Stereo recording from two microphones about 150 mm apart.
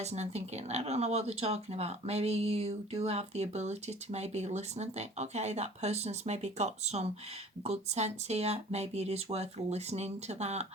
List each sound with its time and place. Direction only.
0.0 s speech: 45° right (ahead or behind)